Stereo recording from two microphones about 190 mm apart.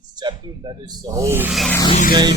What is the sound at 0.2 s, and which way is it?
Speech, 25° right (ahead or behind).